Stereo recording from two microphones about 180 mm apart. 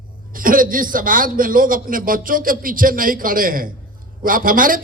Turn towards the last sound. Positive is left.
turn(degrees=-50)  # may be behind; listen again after turning